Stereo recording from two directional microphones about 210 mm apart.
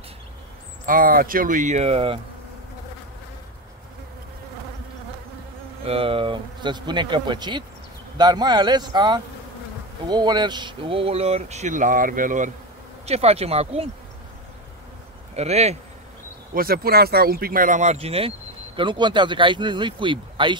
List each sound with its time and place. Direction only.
0.8 s speech: 40° right (ahead or behind)
5.9 s speech: 25° right (ahead or behind)
15.3 s speech: 30° right (ahead or behind)
16.5 s speech: 45° right (ahead or behind); by 20.5 s 25° right (ahead or behind)